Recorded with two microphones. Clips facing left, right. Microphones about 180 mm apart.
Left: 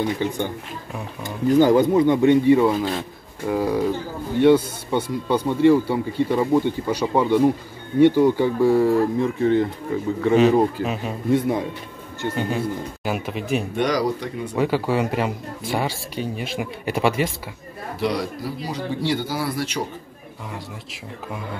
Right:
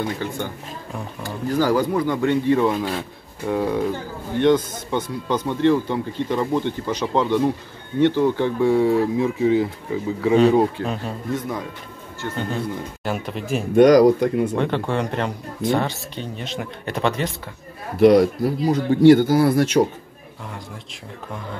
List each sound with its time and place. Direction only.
0.2 s speech: 15° left (ahead or behind)
12.2 s speech: 10° left (ahead or behind)
13.7 s speech: 50° right (ahead or behind)
14.5 s speech: 5° left (ahead or behind)
18.0 s speech: 55° right (ahead or behind)